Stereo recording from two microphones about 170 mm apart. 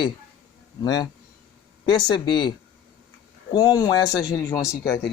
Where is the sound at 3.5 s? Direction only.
20° left (ahead or behind).